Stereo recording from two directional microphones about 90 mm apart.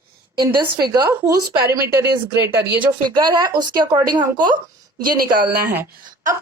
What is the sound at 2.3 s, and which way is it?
Speech, 25° right (ahead or behind).